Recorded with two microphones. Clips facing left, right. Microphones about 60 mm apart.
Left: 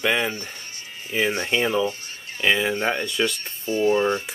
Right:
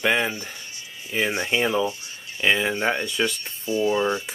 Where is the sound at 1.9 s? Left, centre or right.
Left.